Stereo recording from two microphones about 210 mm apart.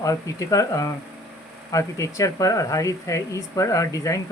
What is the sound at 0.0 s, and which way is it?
Speech, 15° left (ahead or behind).